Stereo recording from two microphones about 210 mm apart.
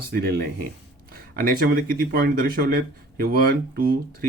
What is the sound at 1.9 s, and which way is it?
Speech, 45° right (ahead or behind).